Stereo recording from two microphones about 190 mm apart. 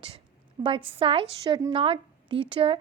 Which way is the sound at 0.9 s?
30° right (ahead or behind).